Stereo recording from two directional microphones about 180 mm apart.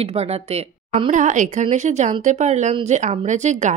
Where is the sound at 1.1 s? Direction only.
45° right (ahead or behind).